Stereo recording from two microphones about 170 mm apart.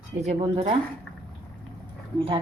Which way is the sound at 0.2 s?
35° right (ahead or behind).